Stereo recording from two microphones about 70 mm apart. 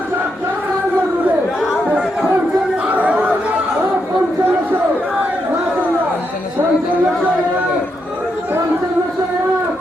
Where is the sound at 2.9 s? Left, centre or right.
Right.